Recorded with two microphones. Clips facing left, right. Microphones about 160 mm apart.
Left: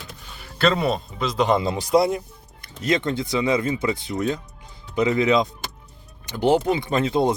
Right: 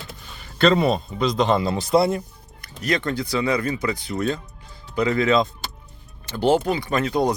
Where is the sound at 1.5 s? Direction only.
15° left (ahead or behind).